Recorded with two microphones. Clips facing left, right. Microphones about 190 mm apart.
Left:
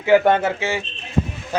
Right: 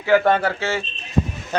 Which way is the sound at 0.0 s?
20° left (ahead or behind).